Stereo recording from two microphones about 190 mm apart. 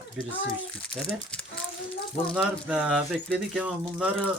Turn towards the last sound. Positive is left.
turn(degrees=-5)  # may be behind; listen again after turning